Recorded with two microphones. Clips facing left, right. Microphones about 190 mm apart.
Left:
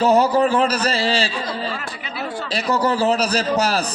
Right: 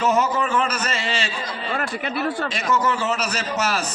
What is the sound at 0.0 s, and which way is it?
Speech, 35° left (ahead or behind).